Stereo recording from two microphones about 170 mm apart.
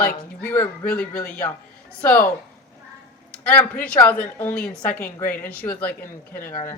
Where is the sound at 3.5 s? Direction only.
10° left (ahead or behind).